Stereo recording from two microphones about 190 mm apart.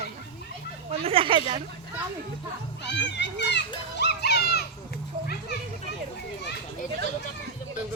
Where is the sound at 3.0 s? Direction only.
65° left (ahead or behind).